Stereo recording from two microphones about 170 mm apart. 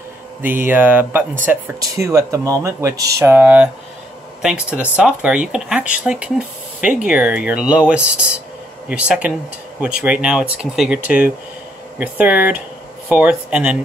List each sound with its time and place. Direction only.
0.4 s speech: 10° right (ahead or behind)